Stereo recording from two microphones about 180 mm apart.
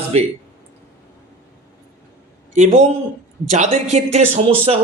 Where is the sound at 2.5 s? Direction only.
40° right (ahead or behind).